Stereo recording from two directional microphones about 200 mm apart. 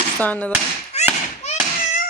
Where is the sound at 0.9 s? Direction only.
35° left (ahead or behind).